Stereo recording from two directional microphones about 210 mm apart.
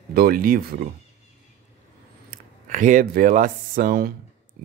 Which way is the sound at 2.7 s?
40° right (ahead or behind).